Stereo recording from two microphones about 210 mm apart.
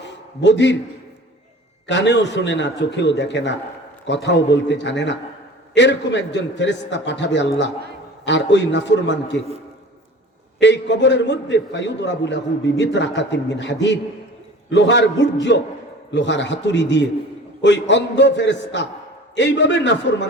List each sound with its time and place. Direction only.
0.0 s a sound: 55° left (ahead or behind)
1.9 s a man's voice: 55° left (ahead or behind)
10.6 s a man's voice: 55° left (ahead or behind)